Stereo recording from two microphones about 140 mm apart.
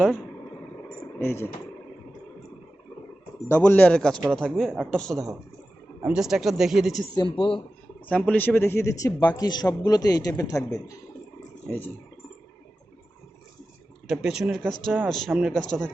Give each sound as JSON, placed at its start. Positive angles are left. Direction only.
{"t": 1.2, "sound": "speech", "side_deg": 15}
{"t": 3.5, "sound": "a man's voice", "side_deg": 10}
{"t": 7.1, "sound": "speech", "side_deg": 35}
{"t": 8.3, "sound": "speech", "side_deg": 15}
{"t": 11.7, "sound": "a man's voice", "side_deg": 0}
{"t": 14.1, "sound": "a man's voice", "side_deg": -5}